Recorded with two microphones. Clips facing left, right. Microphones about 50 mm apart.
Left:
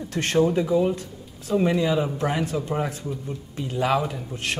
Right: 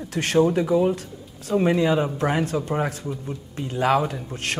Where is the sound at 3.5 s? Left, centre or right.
Right.